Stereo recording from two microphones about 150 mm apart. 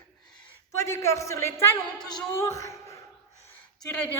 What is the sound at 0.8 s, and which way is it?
A woman's voice, 20° left (ahead or behind).